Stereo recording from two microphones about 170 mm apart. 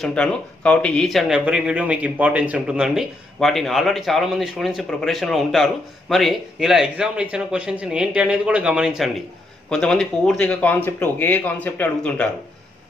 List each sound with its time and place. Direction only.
0.0 s speech: 5° left (ahead or behind)